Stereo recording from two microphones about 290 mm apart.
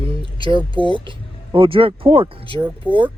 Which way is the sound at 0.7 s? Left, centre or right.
Centre.